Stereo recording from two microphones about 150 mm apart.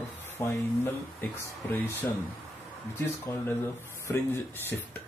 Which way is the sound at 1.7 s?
15° left (ahead or behind).